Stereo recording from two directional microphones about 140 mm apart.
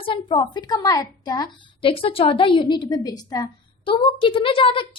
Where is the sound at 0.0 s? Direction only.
35° left (ahead or behind).